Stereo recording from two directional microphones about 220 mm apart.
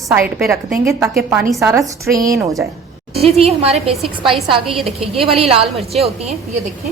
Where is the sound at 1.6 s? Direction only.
15° right (ahead or behind).